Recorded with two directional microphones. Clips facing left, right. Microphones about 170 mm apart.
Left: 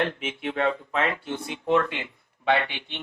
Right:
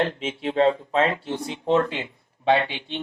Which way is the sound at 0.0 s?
30° right (ahead or behind).